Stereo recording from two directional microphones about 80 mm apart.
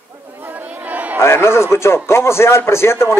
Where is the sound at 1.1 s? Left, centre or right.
Left.